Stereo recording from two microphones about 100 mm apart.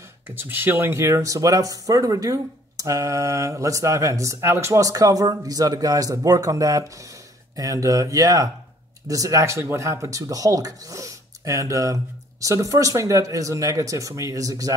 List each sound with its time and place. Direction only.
0.3 s speech: 20° right (ahead or behind); by 14.8 s 35° right (ahead or behind)